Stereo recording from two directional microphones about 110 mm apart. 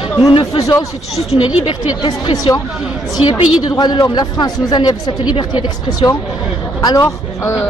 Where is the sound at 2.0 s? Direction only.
45° left (ahead or behind).